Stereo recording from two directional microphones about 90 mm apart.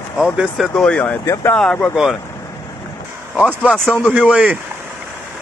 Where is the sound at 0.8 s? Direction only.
15° left (ahead or behind).